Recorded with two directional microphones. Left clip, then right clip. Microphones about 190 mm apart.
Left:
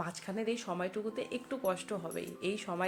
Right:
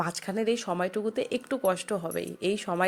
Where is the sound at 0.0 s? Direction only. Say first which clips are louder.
Right 8 dB; 50° right (ahead or behind).